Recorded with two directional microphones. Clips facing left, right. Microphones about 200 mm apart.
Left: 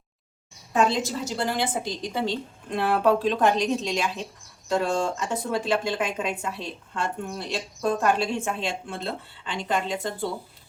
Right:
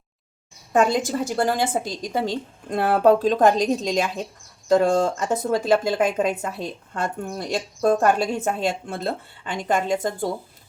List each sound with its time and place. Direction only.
0.7 s speech: 50° right (ahead or behind)